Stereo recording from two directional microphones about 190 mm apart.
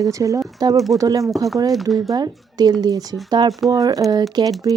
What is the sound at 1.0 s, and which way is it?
Speech, 20° right (ahead or behind).